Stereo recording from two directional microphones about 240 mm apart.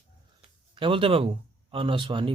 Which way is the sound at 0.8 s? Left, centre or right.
Right.